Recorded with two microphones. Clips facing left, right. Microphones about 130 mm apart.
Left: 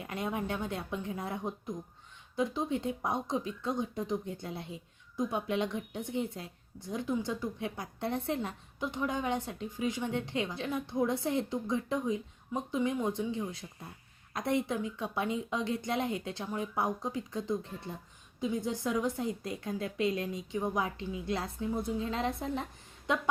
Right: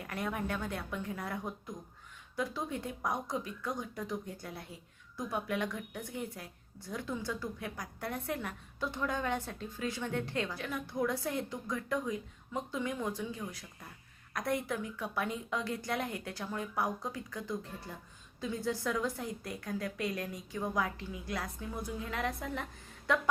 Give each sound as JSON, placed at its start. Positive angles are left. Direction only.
{"t": 0.0, "sound": "speech", "side_deg": 20}